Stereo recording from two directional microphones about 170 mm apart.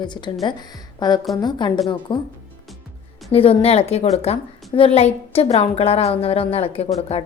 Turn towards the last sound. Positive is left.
turn(degrees=40)  # may be behind; listen again after turning